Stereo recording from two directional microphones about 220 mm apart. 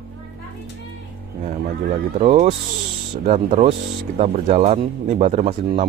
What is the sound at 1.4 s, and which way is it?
Speech, 35° right (ahead or behind).